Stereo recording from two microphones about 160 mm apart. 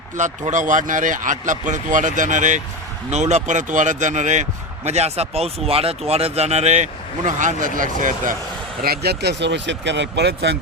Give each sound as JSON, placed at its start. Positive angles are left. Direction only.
{"t": 0.2, "sound": "speech", "side_deg": -50}
{"t": 8.8, "sound": "speech", "side_deg": -80}